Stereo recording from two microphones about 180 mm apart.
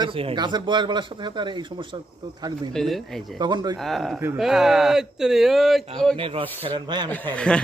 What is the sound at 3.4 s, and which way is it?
Speech, 25° right (ahead or behind).